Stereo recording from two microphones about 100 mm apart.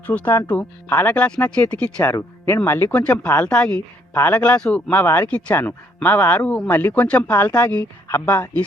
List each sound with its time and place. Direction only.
0.0 s speech: 15° left (ahead or behind)
2.0 s speech: 35° left (ahead or behind)
2.6 s speech: 20° left (ahead or behind)
4.1 s speech: 20° left (ahead or behind)
8.0 s speech: 25° left (ahead or behind)